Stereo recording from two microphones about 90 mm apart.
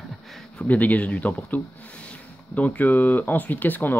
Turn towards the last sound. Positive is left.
turn(degrees=20)  # may be behind; listen again after turning